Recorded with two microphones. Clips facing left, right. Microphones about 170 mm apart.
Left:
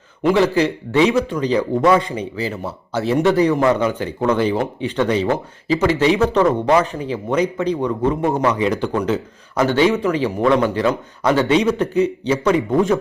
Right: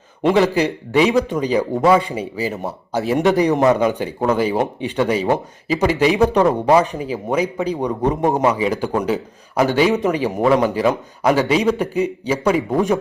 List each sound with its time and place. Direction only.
0.2 s a man's voice: 20° right (ahead or behind)
8.5 s a man's voice: 5° right (ahead or behind)